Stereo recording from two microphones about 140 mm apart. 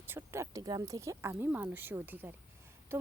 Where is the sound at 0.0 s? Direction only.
15° right (ahead or behind).